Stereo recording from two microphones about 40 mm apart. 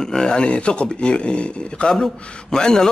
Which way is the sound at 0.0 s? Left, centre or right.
Centre.